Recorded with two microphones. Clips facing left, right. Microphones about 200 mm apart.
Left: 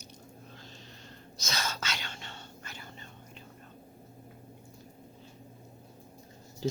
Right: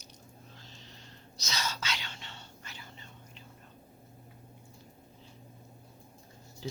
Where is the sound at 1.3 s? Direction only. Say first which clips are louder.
Left 1 dB; 50° left (ahead or behind).